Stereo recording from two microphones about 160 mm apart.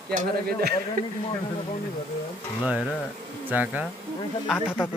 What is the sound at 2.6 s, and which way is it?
Speech, 10° right (ahead or behind).